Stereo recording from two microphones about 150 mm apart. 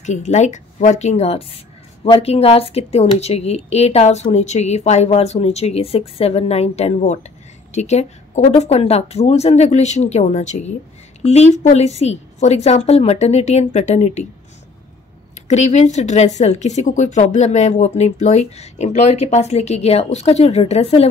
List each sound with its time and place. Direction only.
0.0 s speech: 50° left (ahead or behind)
15.4 s speech: 50° left (ahead or behind)